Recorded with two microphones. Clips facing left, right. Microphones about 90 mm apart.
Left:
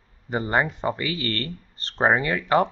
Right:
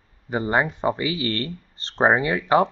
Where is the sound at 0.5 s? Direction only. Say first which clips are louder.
Right 2 dB; 10° right (ahead or behind).